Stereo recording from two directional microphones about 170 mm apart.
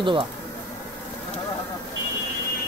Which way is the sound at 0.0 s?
30° right (ahead or behind).